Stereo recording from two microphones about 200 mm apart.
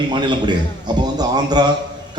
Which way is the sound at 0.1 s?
20° right (ahead or behind).